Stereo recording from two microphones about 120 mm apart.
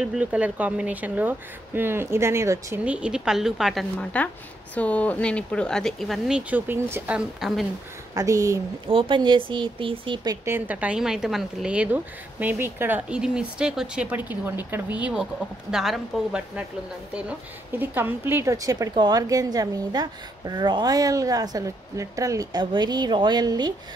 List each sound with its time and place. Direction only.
0.0 s a woman's voice: 10° right (ahead or behind); by 2.8 s 25° right (ahead or behind)
2.8 s a woman's voice: 10° right (ahead or behind)
4.0 s speech: 10° left (ahead or behind); by 6.6 s 5° right (ahead or behind)
6.7 s a woman's voice: 15° right (ahead or behind)
7.2 s a woman's voice: centre (ahead or behind)
8.1 s speech: 30° right (ahead or behind)
8.8 s speech: 45° right (ahead or behind)
10.4 s a woman's voice: 15° right (ahead or behind)
15.7 s a woman's voice: 5° right (ahead or behind)
17.7 s a woman's voice: 15° right (ahead or behind); by 23.7 s 35° right (ahead or behind)